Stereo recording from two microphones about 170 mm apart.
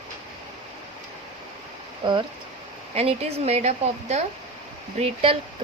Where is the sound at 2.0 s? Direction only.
30° right (ahead or behind).